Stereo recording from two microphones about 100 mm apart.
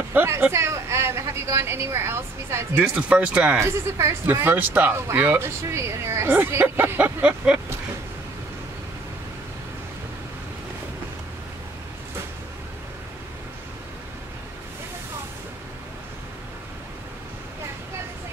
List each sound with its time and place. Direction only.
0.1 s speech: 20° right (ahead or behind)
2.8 s speech: 10° right (ahead or behind)
3.5 s speech: 25° right (ahead or behind)